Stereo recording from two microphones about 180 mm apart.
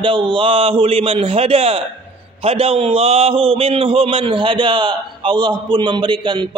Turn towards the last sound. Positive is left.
turn(degrees=-25)  # may be behind; listen again after turning